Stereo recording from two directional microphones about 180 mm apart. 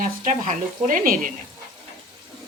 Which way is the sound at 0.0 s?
45° right (ahead or behind).